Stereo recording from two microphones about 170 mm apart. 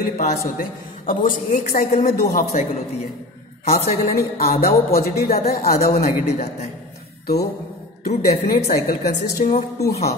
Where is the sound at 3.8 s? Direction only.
60° left (ahead or behind).